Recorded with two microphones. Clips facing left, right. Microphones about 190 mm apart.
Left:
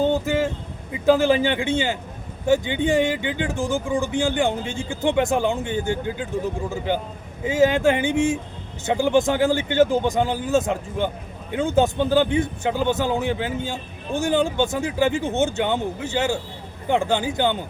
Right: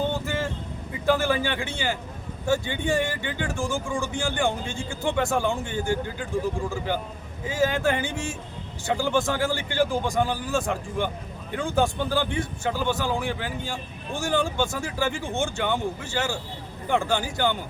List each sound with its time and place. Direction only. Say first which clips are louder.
0.1 s vehicle: left 7 dB; 15° left (ahead or behind)
1.0 s a man's voice: left 6 dB; 20° left (ahead or behind)